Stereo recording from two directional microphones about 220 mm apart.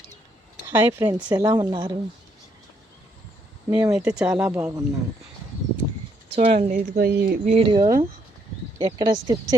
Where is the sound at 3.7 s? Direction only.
5° right (ahead or behind).